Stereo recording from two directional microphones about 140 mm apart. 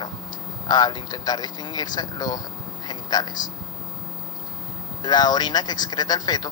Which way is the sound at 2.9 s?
30° left (ahead or behind).